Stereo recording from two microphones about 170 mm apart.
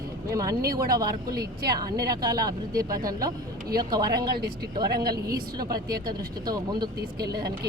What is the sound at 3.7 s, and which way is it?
A woman's voice, 25° right (ahead or behind).